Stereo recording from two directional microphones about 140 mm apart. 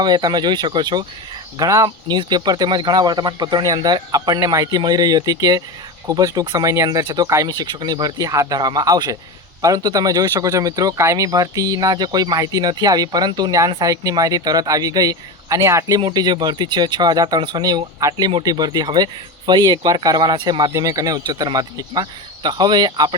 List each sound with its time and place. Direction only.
0.0 s speech: 30° right (ahead or behind)